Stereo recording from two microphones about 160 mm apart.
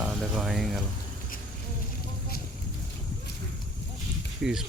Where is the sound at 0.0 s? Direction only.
Centre (ahead or behind).